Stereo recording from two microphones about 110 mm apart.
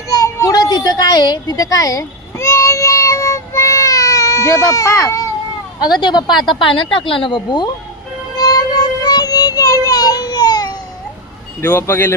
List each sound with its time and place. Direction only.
0.1 s a sound: 30° left (ahead or behind)
5.9 s speech: 40° left (ahead or behind)
8.4 s music: 35° left (ahead or behind)
11.6 s speech: 25° left (ahead or behind)